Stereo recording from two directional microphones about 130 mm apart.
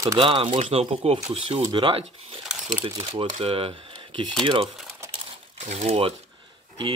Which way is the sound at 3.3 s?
50° right (ahead or behind).